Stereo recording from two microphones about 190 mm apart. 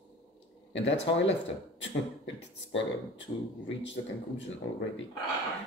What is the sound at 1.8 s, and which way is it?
Speech, 75° left (ahead or behind).